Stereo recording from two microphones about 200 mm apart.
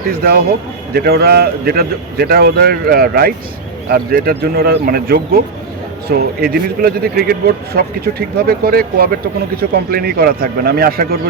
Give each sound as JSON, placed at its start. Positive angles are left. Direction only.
{"t": 0.1, "sound": "speech", "side_deg": -45}